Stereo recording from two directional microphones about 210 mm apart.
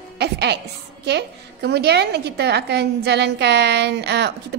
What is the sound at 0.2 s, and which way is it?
Music, 55° right (ahead or behind).